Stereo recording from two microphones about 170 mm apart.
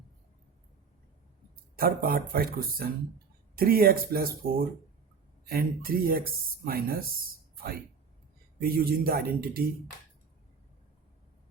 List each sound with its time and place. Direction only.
1.7 s speech: 60° right (ahead or behind)
8.5 s speech: 60° right (ahead or behind)